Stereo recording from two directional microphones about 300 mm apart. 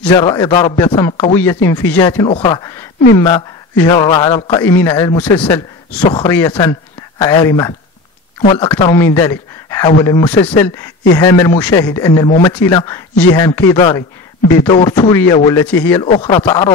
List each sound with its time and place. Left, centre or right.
0.0 s a man's voice: centre